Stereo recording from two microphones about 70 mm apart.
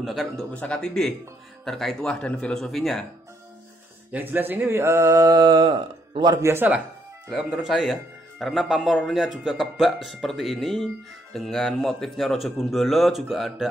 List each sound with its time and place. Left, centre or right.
0.0 s speech: centre
0.5 s speech: centre
4.1 s speech: right
6.4 s speech: right
7.2 s speech: centre